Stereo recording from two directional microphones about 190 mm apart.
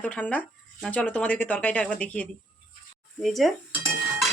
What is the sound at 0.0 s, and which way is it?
Speech, 5° left (ahead or behind).